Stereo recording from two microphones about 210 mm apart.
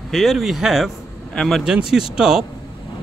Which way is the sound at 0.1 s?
Centre (ahead or behind).